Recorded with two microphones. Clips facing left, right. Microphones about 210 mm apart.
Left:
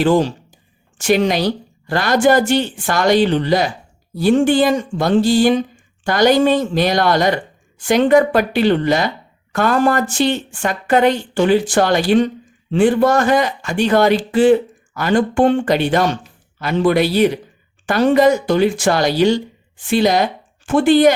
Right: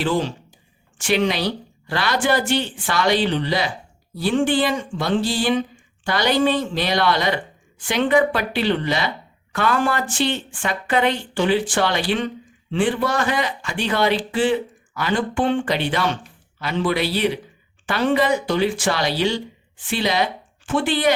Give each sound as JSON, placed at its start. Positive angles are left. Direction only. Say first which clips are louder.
{"t": 0.0, "sound": "speech", "louder": "left 7 dB", "side_deg": 45}